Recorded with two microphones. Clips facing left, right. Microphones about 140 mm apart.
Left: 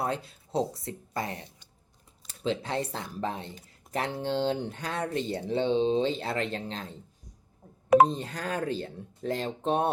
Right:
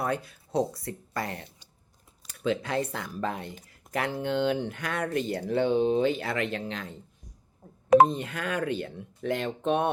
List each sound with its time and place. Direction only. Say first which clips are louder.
0.0 s speech: right 1 dB; 25° left (ahead or behind)
8.0 s speech: right 1 dB; 35° left (ahead or behind)